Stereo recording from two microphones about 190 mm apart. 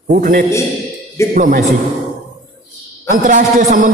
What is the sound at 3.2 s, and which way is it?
Speech, 45° right (ahead or behind).